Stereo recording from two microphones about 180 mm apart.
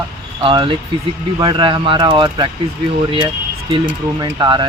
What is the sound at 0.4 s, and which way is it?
Speech, 30° right (ahead or behind).